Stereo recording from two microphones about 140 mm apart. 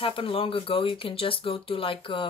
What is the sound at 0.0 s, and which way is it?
Speech, 40° left (ahead or behind).